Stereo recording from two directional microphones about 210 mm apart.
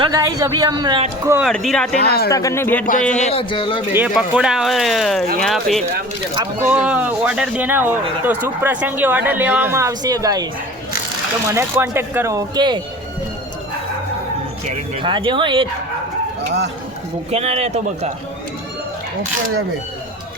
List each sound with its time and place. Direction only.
0.0 s speech: 15° right (ahead or behind)
1.3 s speech: centre (ahead or behind)
2.0 s speech: 50° left (ahead or behind)
2.3 s speech: 15° left (ahead or behind)
3.2 s speech: 30° left (ahead or behind)
3.9 s speech: 5° right (ahead or behind)
11.4 s speech: 10° right (ahead or behind)
14.7 s speech: 25° right (ahead or behind)
17.3 s a man's voice: 30° right (ahead or behind)